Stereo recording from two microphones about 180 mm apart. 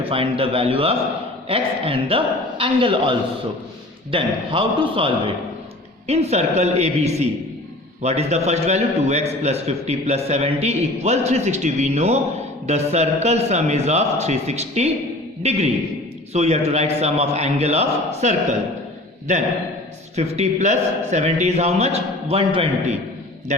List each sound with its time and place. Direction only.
0.0 s a man's voice: 30° right (ahead or behind)
20.1 s a man's voice: 40° right (ahead or behind)